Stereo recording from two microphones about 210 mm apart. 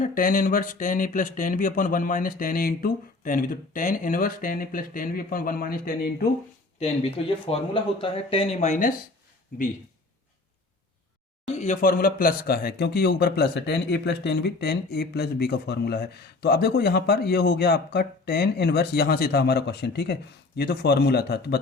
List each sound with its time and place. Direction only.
0.0 s speech: 40° left (ahead or behind)
6.7 s speech: 30° left (ahead or behind)
11.5 s speech: 35° left (ahead or behind)